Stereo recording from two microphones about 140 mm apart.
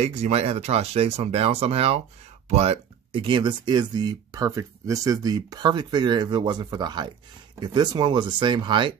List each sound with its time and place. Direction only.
0.0 s speech: 50° right (ahead or behind); by 8.9 s 35° right (ahead or behind)